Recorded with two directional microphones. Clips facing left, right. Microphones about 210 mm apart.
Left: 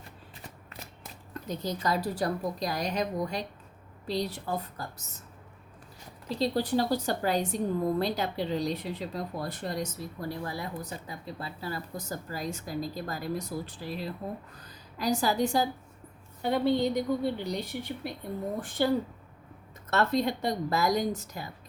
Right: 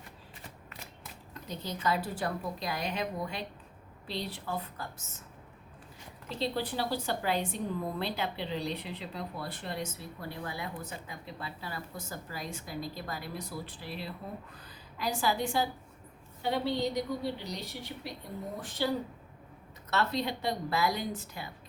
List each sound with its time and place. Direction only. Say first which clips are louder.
1.3 s a woman's voice: left 6 dB; 45° left (ahead or behind)
6.2 s a woman's voice: left 5 dB; 40° left (ahead or behind)
19.9 s a woman's voice: left 5 dB; 50° left (ahead or behind)